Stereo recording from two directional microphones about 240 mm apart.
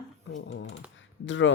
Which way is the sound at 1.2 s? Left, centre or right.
Left.